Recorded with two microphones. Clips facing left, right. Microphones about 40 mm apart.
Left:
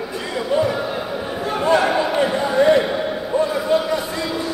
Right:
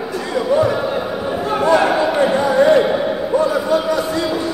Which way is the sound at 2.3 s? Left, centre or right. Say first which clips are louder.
Right 3 dB; right.